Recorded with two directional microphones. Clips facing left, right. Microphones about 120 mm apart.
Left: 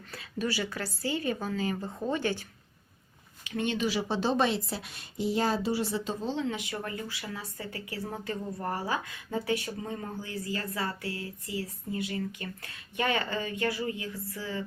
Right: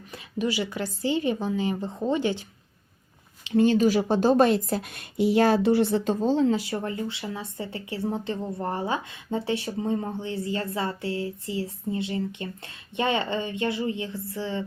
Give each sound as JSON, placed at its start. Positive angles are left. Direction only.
{"t": 0.1, "sound": "a woman's voice", "side_deg": -15}
{"t": 3.4, "sound": "a woman's voice", "side_deg": -30}